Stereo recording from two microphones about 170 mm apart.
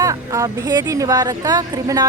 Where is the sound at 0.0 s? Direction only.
20° right (ahead or behind).